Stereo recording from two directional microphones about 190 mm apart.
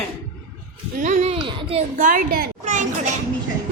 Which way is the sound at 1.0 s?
35° right (ahead or behind).